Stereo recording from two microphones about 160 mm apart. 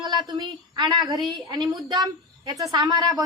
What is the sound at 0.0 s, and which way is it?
A woman's voice, 25° right (ahead or behind).